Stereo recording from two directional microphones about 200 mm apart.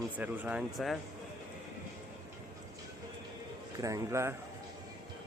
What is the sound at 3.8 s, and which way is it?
Speech, 15° right (ahead or behind).